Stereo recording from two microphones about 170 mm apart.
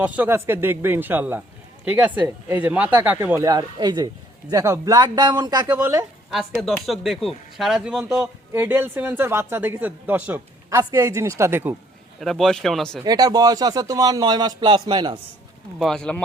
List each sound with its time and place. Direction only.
0.0 s speech: 10° right (ahead or behind)
6.3 s speech: centre (ahead or behind)
12.2 s speech: centre (ahead or behind)
13.1 s a man's voice: 20° right (ahead or behind)
15.8 s speech: 5° left (ahead or behind)